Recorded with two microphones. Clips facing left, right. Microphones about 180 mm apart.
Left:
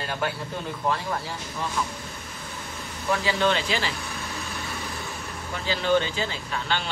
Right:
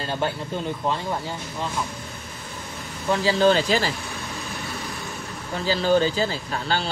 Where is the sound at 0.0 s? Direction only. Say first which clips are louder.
Right 3 dB; 30° right (ahead or behind).